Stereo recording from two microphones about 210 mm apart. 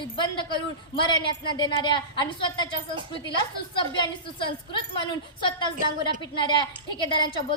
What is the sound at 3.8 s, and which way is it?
A woman's voice, 25° left (ahead or behind).